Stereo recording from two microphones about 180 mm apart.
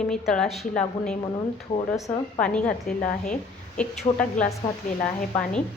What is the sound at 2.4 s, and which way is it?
Speech, 5° left (ahead or behind).